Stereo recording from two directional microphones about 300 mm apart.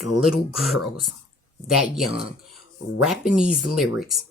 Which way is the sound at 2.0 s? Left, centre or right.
Left.